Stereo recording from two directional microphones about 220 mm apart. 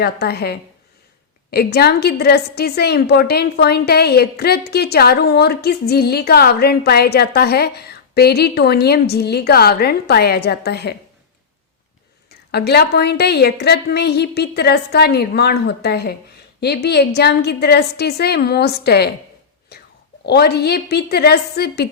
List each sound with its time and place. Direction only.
0.0 s a woman's voice: 45° left (ahead or behind)
12.5 s a woman's voice: 45° left (ahead or behind)
19.7 s whispering: 45° left (ahead or behind)
20.2 s a woman's voice: 45° left (ahead or behind)